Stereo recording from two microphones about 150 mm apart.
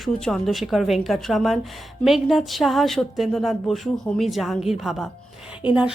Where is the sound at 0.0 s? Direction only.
5° left (ahead or behind).